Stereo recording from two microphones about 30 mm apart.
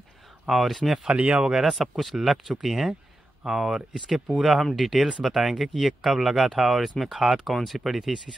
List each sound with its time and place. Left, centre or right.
0.5 s speech: centre
1.1 s speech: right
1.6 s speech: centre